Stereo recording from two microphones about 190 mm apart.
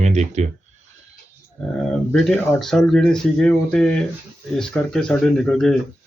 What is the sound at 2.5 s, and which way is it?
Speech, centre (ahead or behind).